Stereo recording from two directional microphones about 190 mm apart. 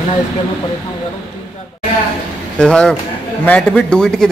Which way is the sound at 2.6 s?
5° left (ahead or behind).